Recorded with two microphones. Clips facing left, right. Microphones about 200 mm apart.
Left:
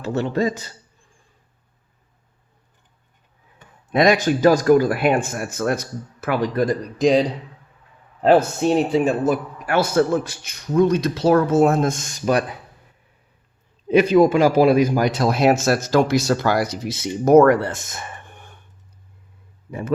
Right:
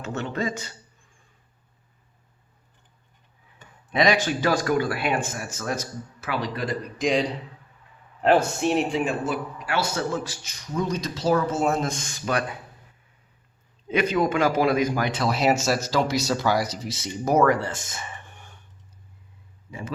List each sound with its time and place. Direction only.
0.0 s speech: 35° left (ahead or behind)
3.9 s speech: 50° left (ahead or behind)
13.8 s speech: 30° left (ahead or behind); by 18.6 s 55° left (ahead or behind)